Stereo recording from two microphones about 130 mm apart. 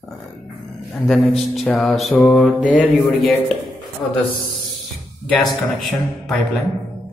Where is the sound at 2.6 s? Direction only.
10° right (ahead or behind).